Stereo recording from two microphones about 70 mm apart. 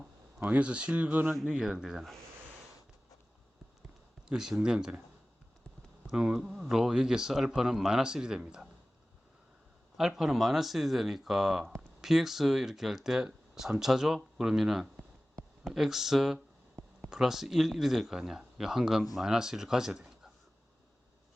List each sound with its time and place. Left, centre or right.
0.3 s speech: right
1.5 s speech: centre
4.3 s speech: centre
6.1 s speech: centre
10.0 s speech: centre